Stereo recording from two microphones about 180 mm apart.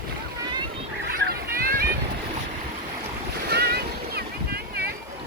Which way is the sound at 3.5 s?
60° right (ahead or behind).